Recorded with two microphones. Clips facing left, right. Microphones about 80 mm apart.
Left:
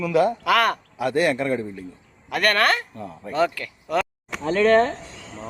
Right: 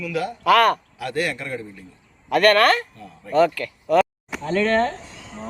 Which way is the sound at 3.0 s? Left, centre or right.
Left.